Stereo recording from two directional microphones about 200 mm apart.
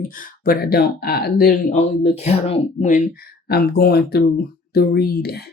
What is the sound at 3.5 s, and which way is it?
Speech, 50° left (ahead or behind).